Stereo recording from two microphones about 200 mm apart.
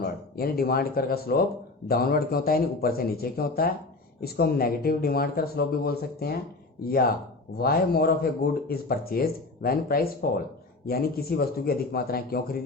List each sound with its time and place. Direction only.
0.0 s speech: 50° left (ahead or behind)